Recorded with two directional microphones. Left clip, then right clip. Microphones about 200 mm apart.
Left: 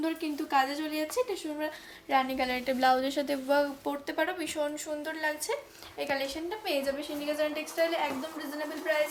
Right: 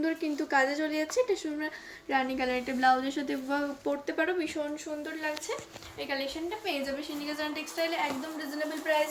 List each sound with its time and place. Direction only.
0.0 s a woman's voice: 25° left (ahead or behind); by 6.2 s 45° left (ahead or behind)
6.7 s speech: 30° left (ahead or behind)
7.3 s a woman's voice: 10° left (ahead or behind)